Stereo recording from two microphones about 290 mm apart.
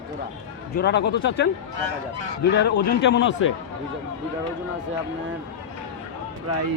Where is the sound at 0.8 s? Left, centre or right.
Left.